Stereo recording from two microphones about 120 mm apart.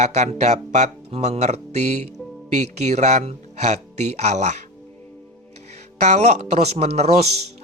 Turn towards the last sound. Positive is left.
turn(degrees=-65)  # may be behind; listen again after turning